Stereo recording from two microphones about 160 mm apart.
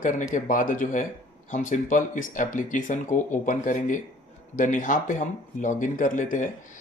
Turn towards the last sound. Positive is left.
turn(degrees=55)  # may be behind; listen again after turning